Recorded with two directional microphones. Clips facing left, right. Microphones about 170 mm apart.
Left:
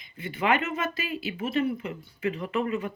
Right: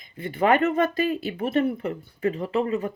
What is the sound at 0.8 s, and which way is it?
Speech, 50° right (ahead or behind).